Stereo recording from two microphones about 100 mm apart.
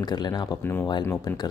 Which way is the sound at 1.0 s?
30° left (ahead or behind).